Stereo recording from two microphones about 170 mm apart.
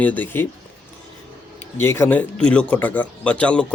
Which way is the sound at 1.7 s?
15° left (ahead or behind).